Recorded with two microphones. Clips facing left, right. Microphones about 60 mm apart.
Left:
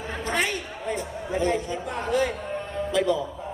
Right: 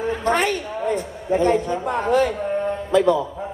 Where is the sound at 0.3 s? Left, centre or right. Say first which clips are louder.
Right 6 dB; right.